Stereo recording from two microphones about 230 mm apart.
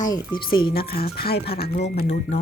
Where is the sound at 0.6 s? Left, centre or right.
Left.